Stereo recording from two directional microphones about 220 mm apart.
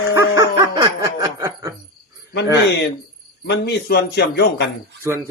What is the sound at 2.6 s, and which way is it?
A man's voice, 50° left (ahead or behind).